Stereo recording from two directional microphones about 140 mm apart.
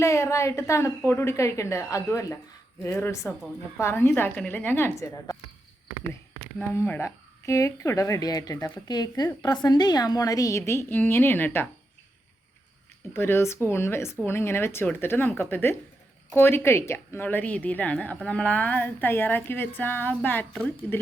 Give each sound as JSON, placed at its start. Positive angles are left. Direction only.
{"t": 0.0, "sound": "a woman's voice", "side_deg": 20}
{"t": 6.6, "sound": "a woman's voice", "side_deg": 15}
{"t": 13.1, "sound": "a woman's voice", "side_deg": 15}